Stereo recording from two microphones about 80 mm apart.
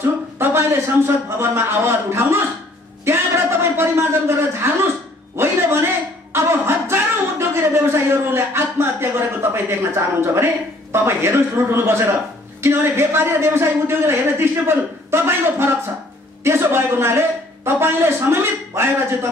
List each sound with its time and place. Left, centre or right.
0.4 s a man's voice: right
5.4 s a sound: right
12.6 s speech: right